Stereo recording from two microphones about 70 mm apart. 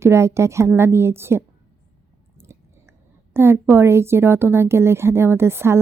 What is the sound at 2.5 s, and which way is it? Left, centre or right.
Chewing, right.